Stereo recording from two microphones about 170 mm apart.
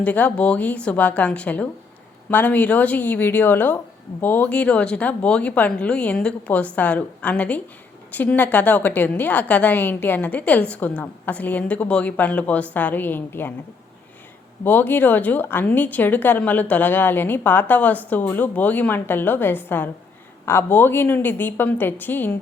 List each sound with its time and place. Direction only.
0.0 s a woman's voice: 10° left (ahead or behind)
14.6 s a woman's voice: 10° left (ahead or behind)